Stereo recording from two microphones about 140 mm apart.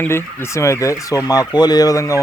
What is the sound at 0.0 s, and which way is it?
Speech, 20° left (ahead or behind).